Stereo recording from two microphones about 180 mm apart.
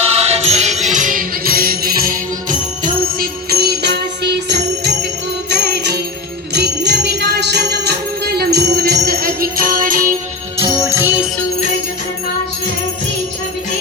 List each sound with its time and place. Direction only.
0.2 s music: 35° right (ahead or behind); by 2.1 s 55° right (ahead or behind)
3.2 s music: 60° right (ahead or behind)
6.5 s jingle bell: 70° right (ahead or behind); by 10.2 s 50° right (ahead or behind)
10.6 s jingle bell: 20° right (ahead or behind)